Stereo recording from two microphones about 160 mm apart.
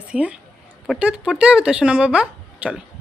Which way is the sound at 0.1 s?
10° right (ahead or behind).